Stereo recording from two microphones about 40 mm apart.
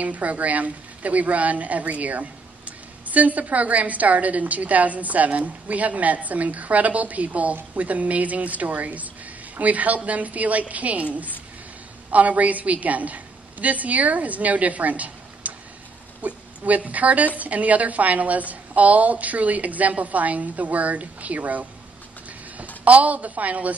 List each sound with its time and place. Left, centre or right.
0.0 s a woman's voice: right
12.1 s a woman's voice: right
22.8 s a woman's voice: right